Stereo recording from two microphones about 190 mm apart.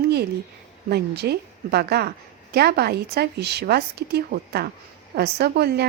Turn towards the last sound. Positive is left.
turn(degrees=-60)  # may be behind; listen again after turning